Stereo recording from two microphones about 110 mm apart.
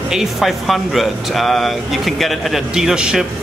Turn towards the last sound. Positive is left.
turn(degrees=-5)  # may be behind; listen again after turning